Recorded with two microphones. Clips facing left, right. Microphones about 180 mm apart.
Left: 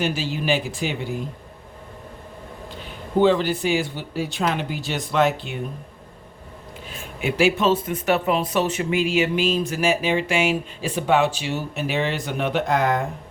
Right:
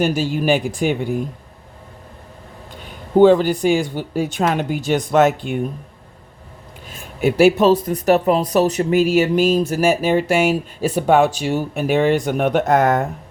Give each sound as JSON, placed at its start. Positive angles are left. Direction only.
{"t": 0.0, "sound": "speech", "side_deg": -50}
{"t": 3.2, "sound": "speech", "side_deg": -45}
{"t": 6.9, "sound": "speech", "side_deg": -40}